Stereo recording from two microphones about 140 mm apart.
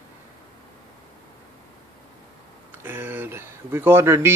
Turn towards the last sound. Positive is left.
turn(degrees=-20)  # may be behind; listen again after turning